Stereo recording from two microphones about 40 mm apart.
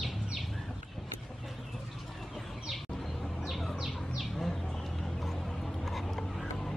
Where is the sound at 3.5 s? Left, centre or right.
Centre.